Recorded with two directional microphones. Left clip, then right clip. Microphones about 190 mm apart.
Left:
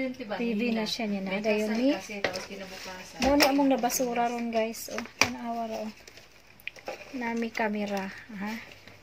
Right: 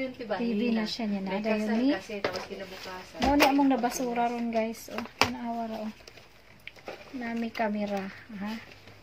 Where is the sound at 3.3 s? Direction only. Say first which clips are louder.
Even; 15° left (ahead or behind).